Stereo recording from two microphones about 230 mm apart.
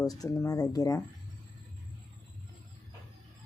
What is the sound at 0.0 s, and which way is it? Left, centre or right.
Speech, centre.